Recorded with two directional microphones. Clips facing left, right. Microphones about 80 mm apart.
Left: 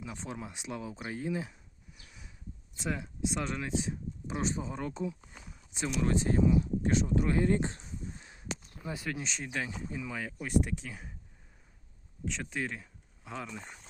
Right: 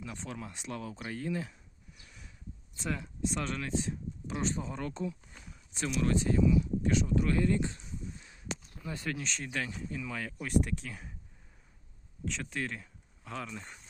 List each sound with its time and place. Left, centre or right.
0.0 s speech: centre
2.0 s a sound: centre
2.7 s speech: centre
6.1 s speech: left
8.9 s speech: centre
12.2 s speech: centre